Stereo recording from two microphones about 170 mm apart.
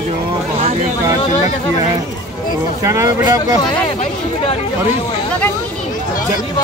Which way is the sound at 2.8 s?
20° right (ahead or behind).